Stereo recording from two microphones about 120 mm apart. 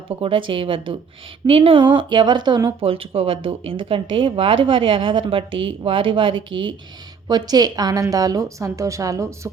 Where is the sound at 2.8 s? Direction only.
50° right (ahead or behind).